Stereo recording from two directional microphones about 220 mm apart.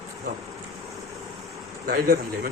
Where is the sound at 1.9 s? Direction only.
40° right (ahead or behind).